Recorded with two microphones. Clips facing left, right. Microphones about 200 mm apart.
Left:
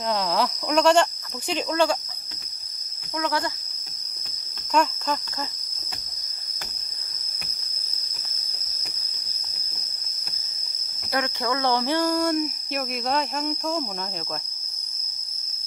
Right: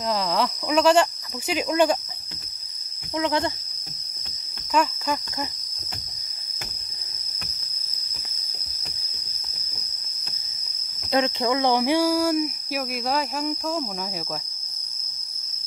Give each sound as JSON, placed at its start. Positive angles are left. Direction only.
{"t": 0.1, "sound": "speech", "side_deg": 0}
{"t": 3.2, "sound": "speech", "side_deg": -20}
{"t": 4.7, "sound": "speech", "side_deg": -10}
{"t": 11.1, "sound": "speech", "side_deg": -20}